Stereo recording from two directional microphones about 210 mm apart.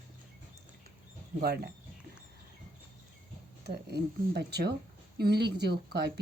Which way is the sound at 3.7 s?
50° right (ahead or behind).